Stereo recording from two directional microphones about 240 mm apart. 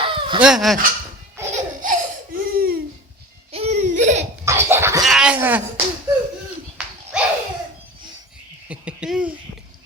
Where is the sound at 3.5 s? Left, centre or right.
Right.